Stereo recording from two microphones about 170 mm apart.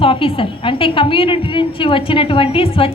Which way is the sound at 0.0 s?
30° left (ahead or behind).